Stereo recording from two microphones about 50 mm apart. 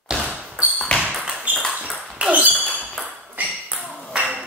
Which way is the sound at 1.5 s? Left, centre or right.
Right.